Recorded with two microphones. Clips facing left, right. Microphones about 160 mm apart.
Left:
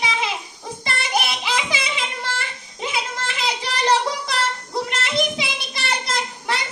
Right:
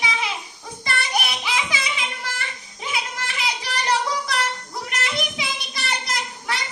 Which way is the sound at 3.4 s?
30° left (ahead or behind).